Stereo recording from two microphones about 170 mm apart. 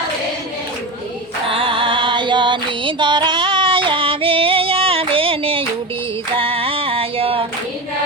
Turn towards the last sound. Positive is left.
turn(degrees=-35)  # may be behind; listen again after turning